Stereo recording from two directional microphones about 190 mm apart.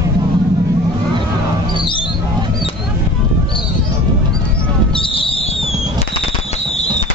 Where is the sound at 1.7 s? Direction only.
25° left (ahead or behind).